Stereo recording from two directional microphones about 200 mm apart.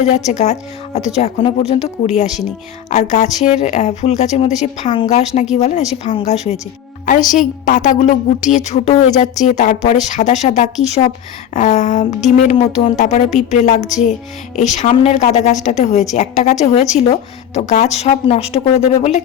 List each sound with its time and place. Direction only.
0.0 s a woman's voice: 35° left (ahead or behind)